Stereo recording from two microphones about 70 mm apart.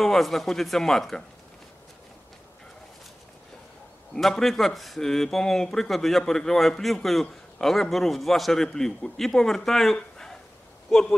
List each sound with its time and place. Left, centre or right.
0.0 s speech: centre
4.1 s speech: centre